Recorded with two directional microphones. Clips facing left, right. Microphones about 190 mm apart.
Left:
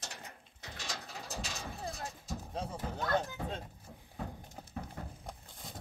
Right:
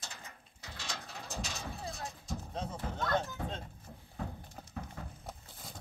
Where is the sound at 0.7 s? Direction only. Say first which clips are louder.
Even; 15° left (ahead or behind).